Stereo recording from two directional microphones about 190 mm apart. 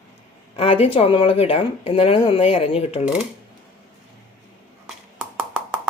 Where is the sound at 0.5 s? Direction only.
30° left (ahead or behind).